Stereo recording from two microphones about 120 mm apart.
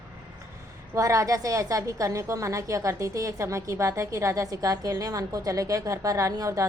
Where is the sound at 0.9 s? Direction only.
25° right (ahead or behind).